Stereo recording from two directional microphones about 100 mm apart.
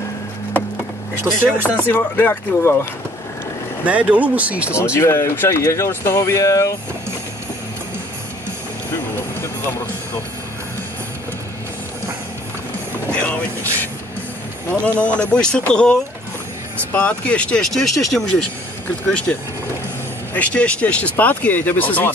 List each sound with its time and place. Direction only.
1.3 s speech: 25° right (ahead or behind)
1.6 s speech: 20° left (ahead or behind)
3.8 s speech: 15° right (ahead or behind)
4.9 s speech: 30° left (ahead or behind)
13.1 s vehicle: 15° left (ahead or behind)
14.7 s speech: 15° left (ahead or behind)
20.3 s speech: 15° left (ahead or behind)